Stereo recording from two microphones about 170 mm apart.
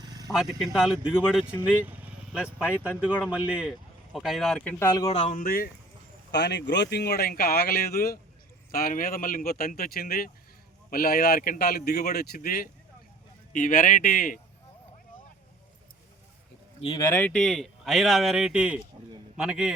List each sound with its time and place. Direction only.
0.0 s vehicle: 20° right (ahead or behind)
0.3 s speech: 5° right (ahead or behind)
1.8 s vehicle: 10° right (ahead or behind)
3.0 s speech: 5° right (ahead or behind)
4.8 s speech: 20° left (ahead or behind)
5.0 s speech: 40° left (ahead or behind); by 5.6 s 55° left (ahead or behind)
6.3 s speech: 85° left; by 14.3 s 55° left (ahead or behind)
16.8 s speech: 25° left (ahead or behind)
17.2 s speech: 5° left (ahead or behind)